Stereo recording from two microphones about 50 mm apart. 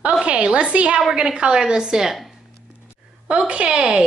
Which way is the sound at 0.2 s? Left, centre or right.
Centre.